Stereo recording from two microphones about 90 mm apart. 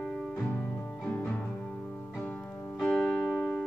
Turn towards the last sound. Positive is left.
turn(degrees=20)  # may be behind; listen again after turning